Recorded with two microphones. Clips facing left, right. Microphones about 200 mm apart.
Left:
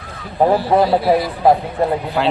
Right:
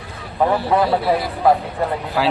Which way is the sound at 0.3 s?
30° left (ahead or behind).